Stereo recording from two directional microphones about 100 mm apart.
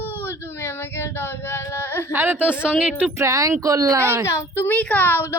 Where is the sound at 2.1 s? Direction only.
20° right (ahead or behind).